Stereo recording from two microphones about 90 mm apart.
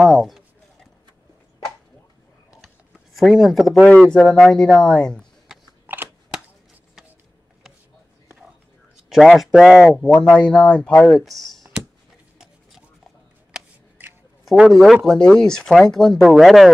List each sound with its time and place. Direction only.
0.0 s a sound: centre (ahead or behind)
3.2 s speech: 5° right (ahead or behind)
3.9 s speech: 15° left (ahead or behind)
5.9 s a sound: 20° right (ahead or behind)
9.1 s speech: 5° right (ahead or behind)
9.9 s speech: 10° left (ahead or behind)
14.7 s speech: 5° left (ahead or behind)